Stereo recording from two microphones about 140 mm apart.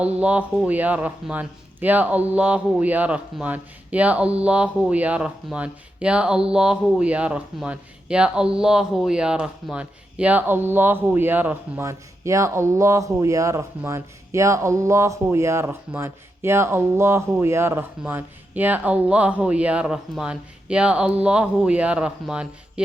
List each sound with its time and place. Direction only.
0.0 s speech: 10° right (ahead or behind)